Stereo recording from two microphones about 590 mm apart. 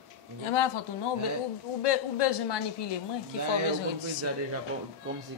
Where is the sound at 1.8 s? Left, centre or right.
Left.